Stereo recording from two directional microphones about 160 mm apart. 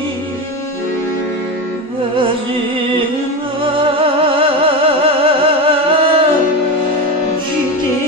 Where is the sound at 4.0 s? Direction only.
35° right (ahead or behind).